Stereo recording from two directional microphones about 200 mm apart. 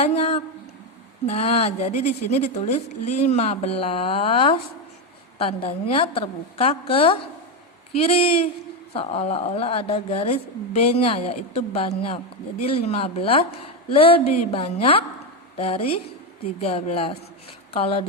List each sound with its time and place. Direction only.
0.0 s speech: 30° left (ahead or behind)